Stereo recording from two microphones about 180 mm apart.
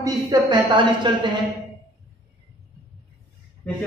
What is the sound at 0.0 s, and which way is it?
A woman's voice, 25° right (ahead or behind).